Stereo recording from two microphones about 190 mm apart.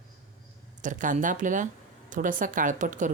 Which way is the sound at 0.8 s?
45° right (ahead or behind).